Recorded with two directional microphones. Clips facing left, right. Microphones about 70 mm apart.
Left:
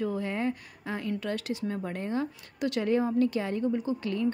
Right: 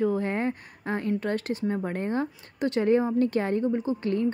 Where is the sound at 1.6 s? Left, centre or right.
Right.